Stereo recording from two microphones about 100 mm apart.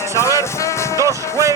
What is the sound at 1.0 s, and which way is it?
Music, 30° right (ahead or behind).